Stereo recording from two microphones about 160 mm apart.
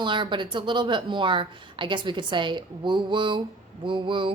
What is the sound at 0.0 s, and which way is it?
A woman's voice, 30° right (ahead or behind).